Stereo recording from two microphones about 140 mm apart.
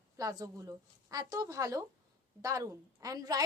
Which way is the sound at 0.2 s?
25° right (ahead or behind).